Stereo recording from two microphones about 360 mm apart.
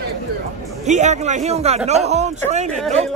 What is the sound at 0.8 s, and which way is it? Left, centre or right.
A man's voice, centre.